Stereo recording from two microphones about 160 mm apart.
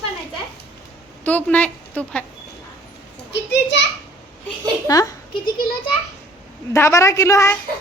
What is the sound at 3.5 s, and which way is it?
Children playing, 90° left.